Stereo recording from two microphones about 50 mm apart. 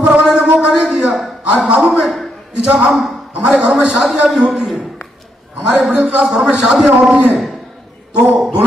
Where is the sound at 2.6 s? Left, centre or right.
Right.